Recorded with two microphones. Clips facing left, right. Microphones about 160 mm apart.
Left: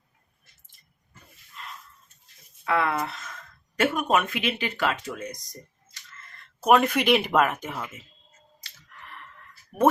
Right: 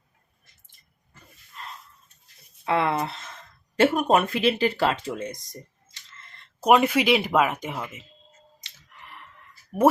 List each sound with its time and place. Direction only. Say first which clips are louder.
1.6 s a sound: right 2 dB; 40° right (ahead or behind)
2.6 s speech: right 2 dB; 25° right (ahead or behind)
8.6 s finger snapping: left 1 dB; 20° right (ahead or behind)